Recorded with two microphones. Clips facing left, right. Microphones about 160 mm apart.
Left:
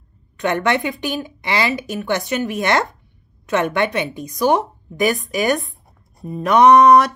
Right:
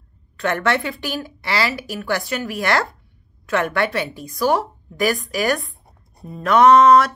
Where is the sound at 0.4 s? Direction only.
15° left (ahead or behind).